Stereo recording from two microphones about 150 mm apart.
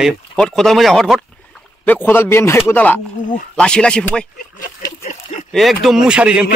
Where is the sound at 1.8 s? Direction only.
15° left (ahead or behind).